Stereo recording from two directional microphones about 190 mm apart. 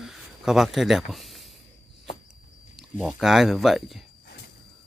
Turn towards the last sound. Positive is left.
turn(degrees=0)  # may be behind; listen again after turning